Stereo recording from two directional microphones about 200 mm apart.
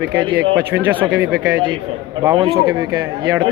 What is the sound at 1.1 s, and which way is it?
Speech, 5° right (ahead or behind).